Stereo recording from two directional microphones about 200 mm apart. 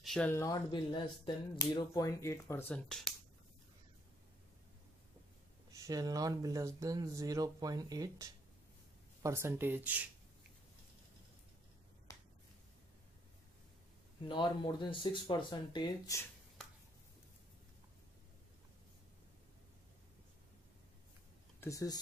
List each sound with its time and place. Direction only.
0.0 s speech: 5° left (ahead or behind)
5.7 s speech: 15° right (ahead or behind)
12.1 s finger snapping: 15° left (ahead or behind)
14.2 s speech: 25° left (ahead or behind)
21.5 s speech: 15° left (ahead or behind)